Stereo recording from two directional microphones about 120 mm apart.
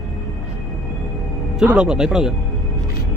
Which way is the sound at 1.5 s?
10° right (ahead or behind).